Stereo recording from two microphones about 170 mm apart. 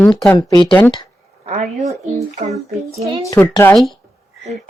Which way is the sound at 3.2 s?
20° left (ahead or behind).